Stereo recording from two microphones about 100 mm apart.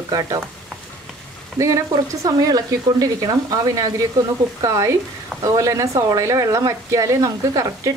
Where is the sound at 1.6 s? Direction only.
30° right (ahead or behind).